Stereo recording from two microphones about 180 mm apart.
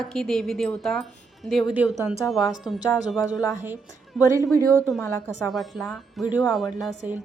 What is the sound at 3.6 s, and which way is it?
Speech, 10° right (ahead or behind).